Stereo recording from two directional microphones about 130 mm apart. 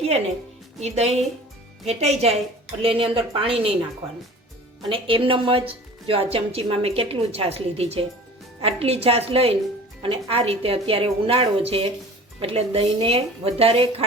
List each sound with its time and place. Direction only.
0.8 s a woman's voice: 55° right (ahead or behind)
2.8 s a woman's voice: 45° right (ahead or behind)
4.9 s a woman's voice: 45° right (ahead or behind)